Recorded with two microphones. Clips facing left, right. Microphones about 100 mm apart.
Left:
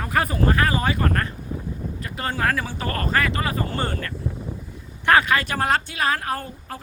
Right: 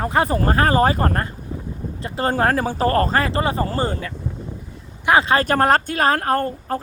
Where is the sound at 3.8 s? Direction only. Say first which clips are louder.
Right 4 dB; 15° right (ahead or behind).